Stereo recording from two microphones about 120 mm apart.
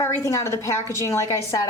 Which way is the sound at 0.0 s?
25° left (ahead or behind).